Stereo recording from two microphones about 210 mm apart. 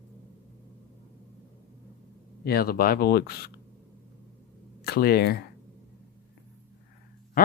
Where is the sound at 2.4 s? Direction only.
45° left (ahead or behind).